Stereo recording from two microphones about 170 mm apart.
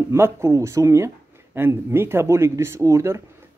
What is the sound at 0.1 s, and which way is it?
Speech, 15° right (ahead or behind).